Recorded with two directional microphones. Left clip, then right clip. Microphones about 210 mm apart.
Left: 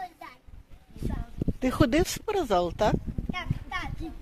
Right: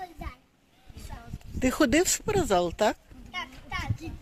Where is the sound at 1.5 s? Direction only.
5° right (ahead or behind).